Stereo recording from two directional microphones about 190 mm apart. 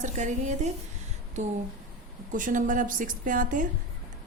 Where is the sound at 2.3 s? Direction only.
45° right (ahead or behind).